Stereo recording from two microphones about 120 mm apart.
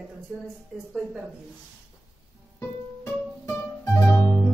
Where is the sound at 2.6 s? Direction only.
20° left (ahead or behind).